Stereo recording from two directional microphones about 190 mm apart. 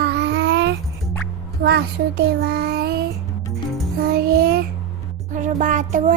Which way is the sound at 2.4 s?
55° right (ahead or behind).